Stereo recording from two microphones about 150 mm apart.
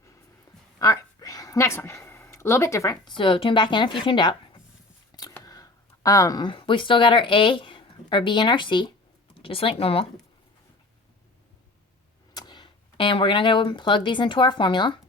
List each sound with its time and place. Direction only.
0.8 s a woman's voice: 25° left (ahead or behind)
5.4 s speech: 25° left (ahead or behind)
12.3 s speech: 25° left (ahead or behind)